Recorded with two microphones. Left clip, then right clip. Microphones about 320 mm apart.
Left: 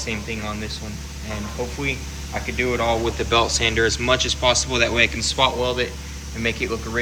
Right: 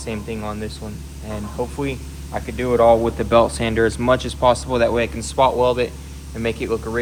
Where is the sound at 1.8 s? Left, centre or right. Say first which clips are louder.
Even; centre.